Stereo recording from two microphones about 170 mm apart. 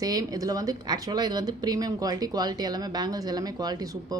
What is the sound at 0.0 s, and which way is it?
Speech, 20° right (ahead or behind).